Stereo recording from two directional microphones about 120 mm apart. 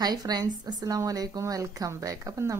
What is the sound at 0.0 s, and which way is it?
A woman's voice, 35° right (ahead or behind).